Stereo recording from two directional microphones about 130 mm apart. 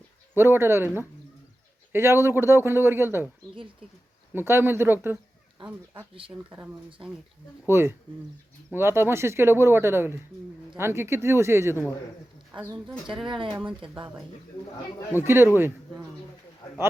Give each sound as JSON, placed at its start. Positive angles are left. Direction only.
{"t": 0.3, "sound": "a man's voice", "side_deg": -15}
{"t": 1.9, "sound": "a man's voice", "side_deg": -20}
{"t": 4.4, "sound": "a man's voice", "side_deg": -15}
{"t": 7.7, "sound": "speech", "side_deg": -20}
{"t": 13.2, "sound": "speech", "side_deg": -40}
{"t": 15.2, "sound": "a man's voice", "side_deg": -20}